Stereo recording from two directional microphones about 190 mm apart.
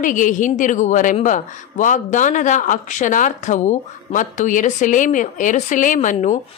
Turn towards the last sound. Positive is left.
turn(degrees=40)  # may be behind; listen again after turning